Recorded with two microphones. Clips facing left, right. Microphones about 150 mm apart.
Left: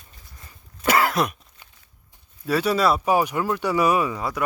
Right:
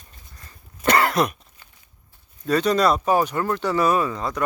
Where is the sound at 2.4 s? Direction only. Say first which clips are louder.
Right 2 dB; 10° left (ahead or behind).